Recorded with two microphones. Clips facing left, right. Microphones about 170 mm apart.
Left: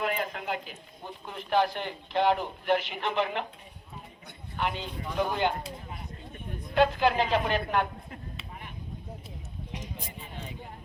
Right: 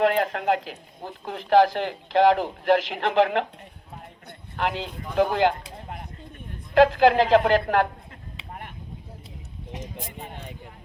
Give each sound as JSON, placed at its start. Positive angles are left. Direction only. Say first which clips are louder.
{"t": 0.0, "sound": "a man's voice", "louder": "right 9 dB", "side_deg": -75}
{"t": 3.9, "sound": "a sound", "louder": "right 4 dB", "side_deg": -70}
{"t": 6.7, "sound": "a man's voice", "louder": "right 7 dB", "side_deg": -90}
{"t": 9.8, "sound": "speech", "louder": "right 5 dB", "side_deg": -55}